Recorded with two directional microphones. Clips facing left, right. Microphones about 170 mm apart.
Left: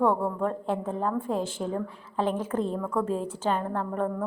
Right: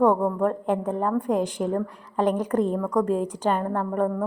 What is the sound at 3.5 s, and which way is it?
Speech, centre (ahead or behind).